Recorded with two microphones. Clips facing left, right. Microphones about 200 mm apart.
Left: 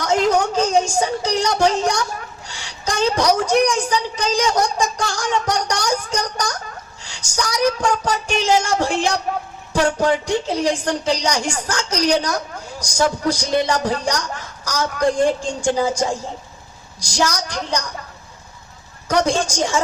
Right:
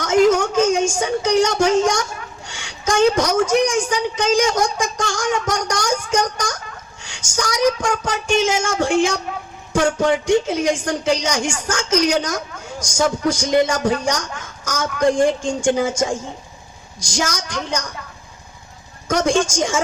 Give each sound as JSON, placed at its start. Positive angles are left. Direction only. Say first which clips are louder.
{"t": 0.0, "sound": "a woman's voice", "louder": "right 3 dB", "side_deg": 35}
{"t": 13.2, "sound": "a woman's voice", "louder": "right 2 dB", "side_deg": 35}
{"t": 19.0, "sound": "a woman's voice", "louder": "right 1 dB", "side_deg": 35}